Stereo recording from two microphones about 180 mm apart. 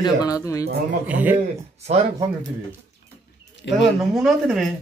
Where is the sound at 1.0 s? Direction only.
10° right (ahead or behind).